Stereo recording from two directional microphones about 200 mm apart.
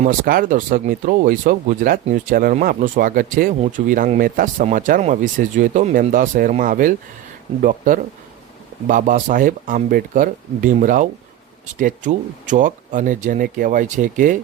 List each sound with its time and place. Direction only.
0.0 s speech: 45° right (ahead or behind)